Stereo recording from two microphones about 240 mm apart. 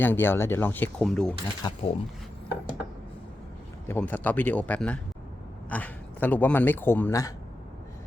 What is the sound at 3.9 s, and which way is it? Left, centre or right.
Speech, centre.